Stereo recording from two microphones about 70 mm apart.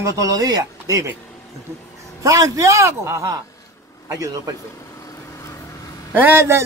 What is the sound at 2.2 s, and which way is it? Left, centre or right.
A man's voice, right.